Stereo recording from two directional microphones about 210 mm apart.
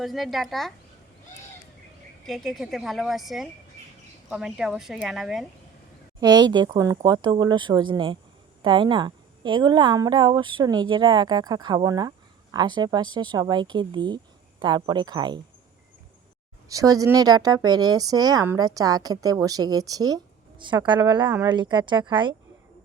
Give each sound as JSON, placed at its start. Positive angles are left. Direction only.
{"t": 0.0, "sound": "a woman's voice", "side_deg": 0}
{"t": 2.2, "sound": "a woman's voice", "side_deg": 0}
{"t": 6.1, "sound": "a woman's voice", "side_deg": -20}
{"t": 16.6, "sound": "speech", "side_deg": -15}